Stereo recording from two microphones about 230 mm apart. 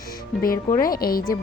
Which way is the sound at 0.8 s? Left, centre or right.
Left.